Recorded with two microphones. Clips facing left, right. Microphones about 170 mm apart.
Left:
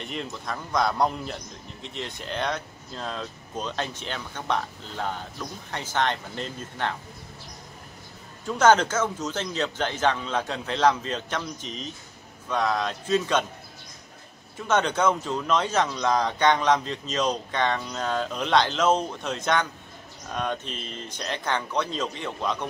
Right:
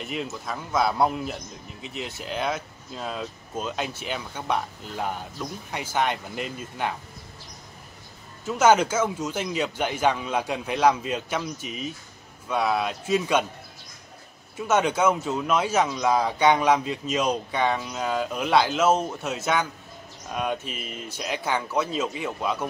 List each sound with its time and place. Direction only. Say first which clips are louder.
0.0 s a man's voice: right 2 dB; 5° right (ahead or behind)
8.5 s a man's voice: even; 10° right (ahead or behind)
14.7 s a man's voice: right 1 dB; 10° right (ahead or behind)